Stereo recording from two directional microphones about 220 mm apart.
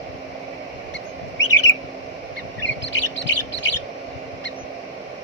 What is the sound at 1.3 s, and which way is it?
Bird, 55° left (ahead or behind).